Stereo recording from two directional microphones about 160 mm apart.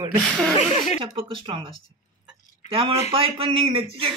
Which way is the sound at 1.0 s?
35° right (ahead or behind).